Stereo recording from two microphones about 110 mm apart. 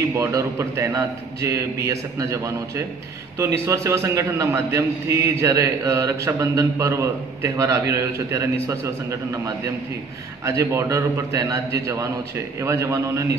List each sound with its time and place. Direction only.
0.1 s a man's voice: 25° right (ahead or behind)
10.4 s a man's voice: 25° right (ahead or behind)